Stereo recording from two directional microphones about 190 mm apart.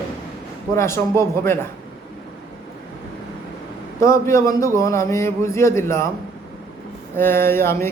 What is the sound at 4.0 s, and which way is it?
Speech, 15° left (ahead or behind).